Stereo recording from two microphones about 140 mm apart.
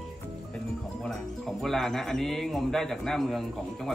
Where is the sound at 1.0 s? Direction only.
Centre (ahead or behind).